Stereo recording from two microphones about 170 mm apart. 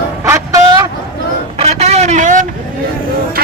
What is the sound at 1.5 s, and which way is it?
Vehicle, 40° right (ahead or behind).